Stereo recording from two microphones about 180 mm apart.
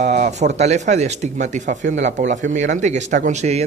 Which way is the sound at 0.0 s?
40° right (ahead or behind).